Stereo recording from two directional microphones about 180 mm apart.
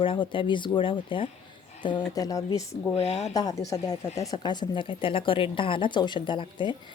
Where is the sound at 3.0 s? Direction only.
35° left (ahead or behind).